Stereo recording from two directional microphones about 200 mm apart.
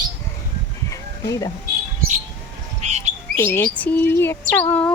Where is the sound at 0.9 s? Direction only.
15° left (ahead or behind).